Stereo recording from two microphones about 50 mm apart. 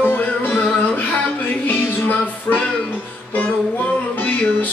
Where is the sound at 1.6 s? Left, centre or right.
Left.